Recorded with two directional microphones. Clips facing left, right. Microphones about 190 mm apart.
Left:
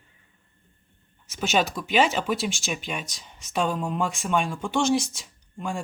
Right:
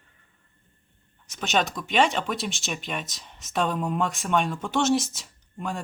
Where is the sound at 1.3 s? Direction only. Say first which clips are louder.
Left 1 dB; 5° left (ahead or behind).